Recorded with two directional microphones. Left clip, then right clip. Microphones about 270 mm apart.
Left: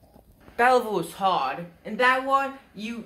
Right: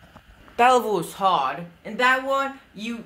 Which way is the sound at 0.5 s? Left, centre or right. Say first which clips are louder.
Right 3 dB; right.